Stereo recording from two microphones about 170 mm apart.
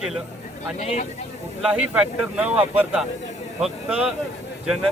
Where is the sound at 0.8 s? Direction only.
45° left (ahead or behind).